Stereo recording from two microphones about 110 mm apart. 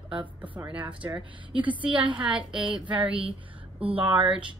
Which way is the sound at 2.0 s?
50° right (ahead or behind).